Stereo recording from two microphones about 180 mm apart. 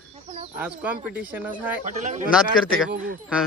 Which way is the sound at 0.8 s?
5° right (ahead or behind).